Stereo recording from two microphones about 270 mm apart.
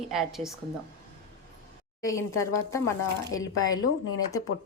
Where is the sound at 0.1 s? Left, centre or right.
Centre.